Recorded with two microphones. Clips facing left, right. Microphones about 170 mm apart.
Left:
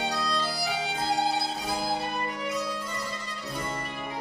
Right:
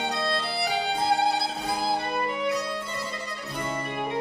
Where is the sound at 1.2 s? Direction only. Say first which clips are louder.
Right 2 dB; 60° right (ahead or behind).